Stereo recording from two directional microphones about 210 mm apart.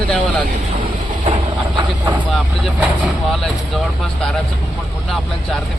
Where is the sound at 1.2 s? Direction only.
25° right (ahead or behind).